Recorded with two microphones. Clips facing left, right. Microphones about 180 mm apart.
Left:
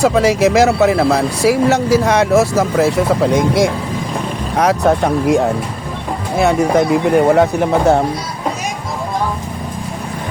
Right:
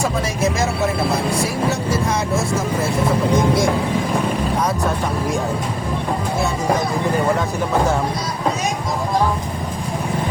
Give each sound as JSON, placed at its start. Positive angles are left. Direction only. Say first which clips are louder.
{"t": 0.0, "sound": "speech", "louder": "left 9 dB", "side_deg": 85}
{"t": 4.5, "sound": "speech", "louder": "left 7 dB", "side_deg": 80}
{"t": 6.4, "sound": "speech", "louder": "left 10 dB", "side_deg": 70}